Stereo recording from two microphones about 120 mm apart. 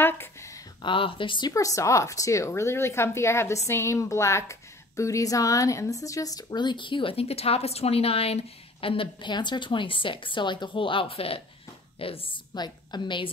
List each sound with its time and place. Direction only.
0.0 s a sound: 20° left (ahead or behind)
0.8 s speech: 45° left (ahead or behind)
1.5 s speech: 25° left (ahead or behind); by 12.4 s 50° left (ahead or behind)
12.5 s a woman's voice: 35° left (ahead or behind)